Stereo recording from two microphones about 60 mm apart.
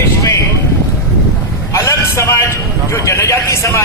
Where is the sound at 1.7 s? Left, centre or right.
Left.